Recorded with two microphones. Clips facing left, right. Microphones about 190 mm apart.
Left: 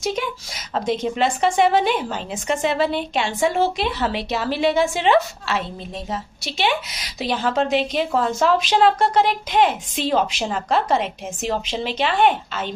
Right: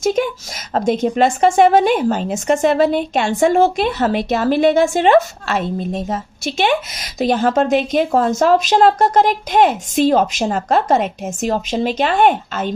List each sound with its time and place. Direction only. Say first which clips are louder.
0.0 s a woman's voice: right 8 dB; 45° right (ahead or behind)